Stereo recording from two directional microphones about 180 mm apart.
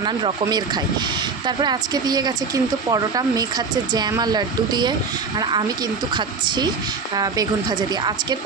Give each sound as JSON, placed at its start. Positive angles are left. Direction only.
{"t": 0.0, "sound": "speech", "side_deg": -25}